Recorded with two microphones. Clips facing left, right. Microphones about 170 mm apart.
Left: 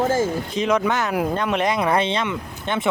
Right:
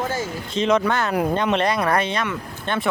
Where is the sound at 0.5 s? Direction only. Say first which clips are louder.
Right 2 dB; 10° left (ahead or behind).